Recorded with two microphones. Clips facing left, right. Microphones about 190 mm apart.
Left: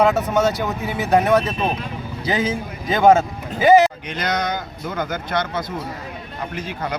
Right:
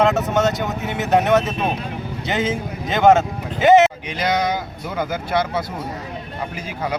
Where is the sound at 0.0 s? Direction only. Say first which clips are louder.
Even; centre (ahead or behind).